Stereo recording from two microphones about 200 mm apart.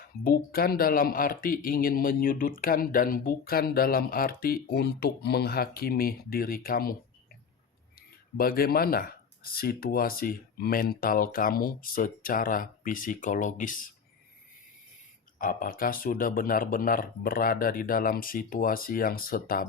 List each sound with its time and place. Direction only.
0.3 s speech: 50° left (ahead or behind)
7.9 s speech: 50° left (ahead or behind)
15.4 s speech: 45° left (ahead or behind)